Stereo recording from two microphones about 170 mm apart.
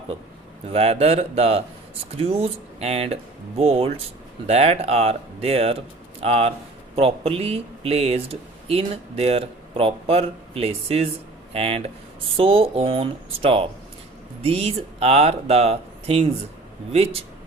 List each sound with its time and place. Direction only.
0.7 s speech: 35° right (ahead or behind)